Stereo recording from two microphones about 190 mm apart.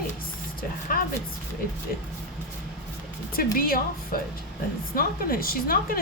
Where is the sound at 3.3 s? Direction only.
50° left (ahead or behind).